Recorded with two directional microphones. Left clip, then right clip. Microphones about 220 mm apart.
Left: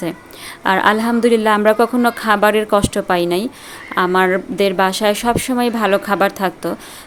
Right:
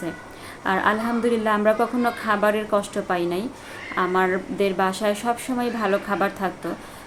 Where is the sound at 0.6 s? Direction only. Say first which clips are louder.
Left 7 dB; 50° left (ahead or behind).